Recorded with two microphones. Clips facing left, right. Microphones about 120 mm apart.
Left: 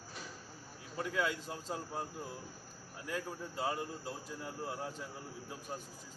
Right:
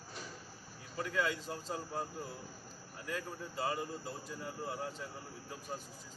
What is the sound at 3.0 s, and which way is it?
Speech, 5° left (ahead or behind).